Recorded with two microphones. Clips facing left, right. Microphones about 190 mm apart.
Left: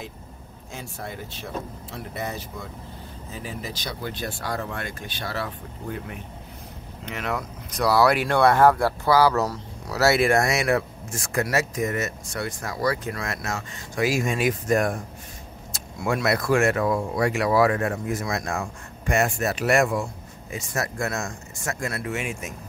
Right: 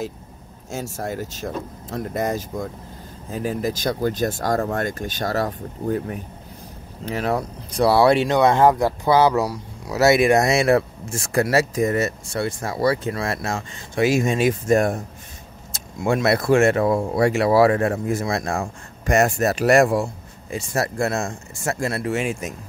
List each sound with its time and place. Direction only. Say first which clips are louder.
0.9 s speech: right 7 dB; 45° right (ahead or behind)